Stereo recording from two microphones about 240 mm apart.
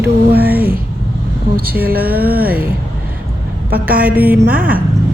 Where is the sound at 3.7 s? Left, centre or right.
Right.